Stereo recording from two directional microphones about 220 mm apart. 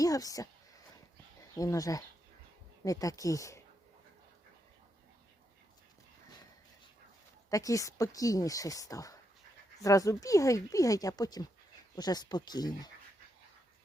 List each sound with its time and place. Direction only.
0.0 s speech: 15° left (ahead or behind)
1.5 s speech: 15° left (ahead or behind)
7.5 s speech: 15° left (ahead or behind)